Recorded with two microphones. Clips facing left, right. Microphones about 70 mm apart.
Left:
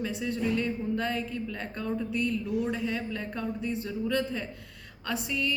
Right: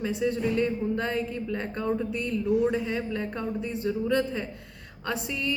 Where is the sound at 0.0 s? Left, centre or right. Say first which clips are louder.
Right 4 dB; right.